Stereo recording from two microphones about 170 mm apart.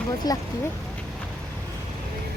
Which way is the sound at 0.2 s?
25° left (ahead or behind).